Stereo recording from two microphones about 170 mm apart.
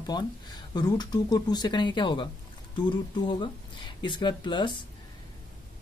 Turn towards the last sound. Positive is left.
turn(degrees=30)  # may be behind; listen again after turning